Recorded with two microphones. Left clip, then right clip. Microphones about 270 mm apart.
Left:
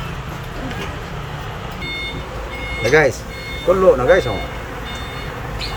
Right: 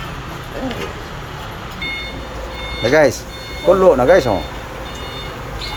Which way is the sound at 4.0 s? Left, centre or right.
Right.